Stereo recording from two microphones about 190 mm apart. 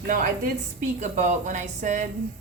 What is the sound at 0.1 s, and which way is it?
A woman's voice, 45° right (ahead or behind).